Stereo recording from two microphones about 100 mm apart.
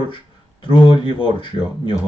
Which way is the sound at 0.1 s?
55° left (ahead or behind).